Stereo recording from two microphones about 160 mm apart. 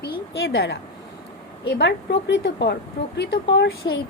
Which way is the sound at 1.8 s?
90° left.